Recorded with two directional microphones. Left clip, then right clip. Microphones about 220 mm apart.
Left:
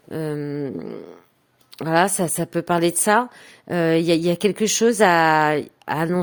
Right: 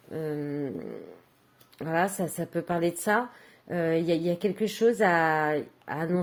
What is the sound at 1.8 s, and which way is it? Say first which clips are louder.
Speech: left 9 dB; 25° left (ahead or behind).